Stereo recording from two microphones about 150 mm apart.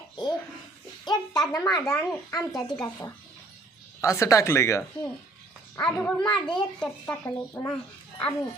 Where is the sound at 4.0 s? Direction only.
20° left (ahead or behind).